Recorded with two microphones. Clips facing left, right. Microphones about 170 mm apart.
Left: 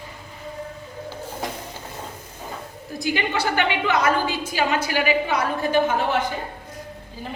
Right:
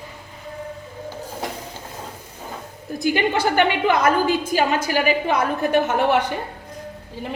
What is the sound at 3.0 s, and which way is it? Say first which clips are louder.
A woman's voice: right 4 dB; 45° right (ahead or behind).